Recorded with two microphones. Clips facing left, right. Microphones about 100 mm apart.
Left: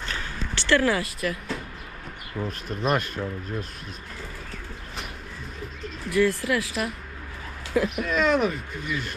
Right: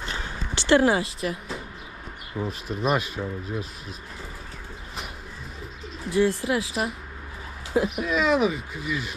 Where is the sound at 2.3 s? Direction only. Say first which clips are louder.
Right 1 dB; centre (ahead or behind).